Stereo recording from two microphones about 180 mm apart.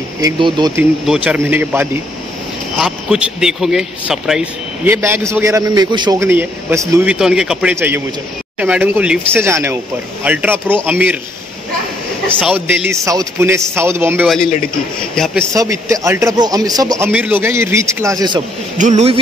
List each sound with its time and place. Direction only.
0.2 s a man's voice: 25° right (ahead or behind)
1.0 s a man's voice: 5° right (ahead or behind)
4.9 s a man's voice: 15° right (ahead or behind)
12.4 s a man's voice: 10° right (ahead or behind)
14.2 s speech: centre (ahead or behind)
15.5 s a man's voice: 20° right (ahead or behind)
18.8 s speech: 40° right (ahead or behind)